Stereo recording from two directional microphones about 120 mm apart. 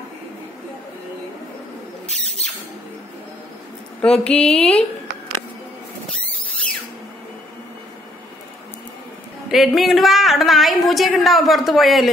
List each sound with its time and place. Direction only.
2.0 s a sound: 65° right (ahead or behind)
4.0 s speech: 10° left (ahead or behind)
9.5 s a woman's voice: centre (ahead or behind)